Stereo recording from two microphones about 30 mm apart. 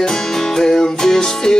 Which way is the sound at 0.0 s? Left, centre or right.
Centre.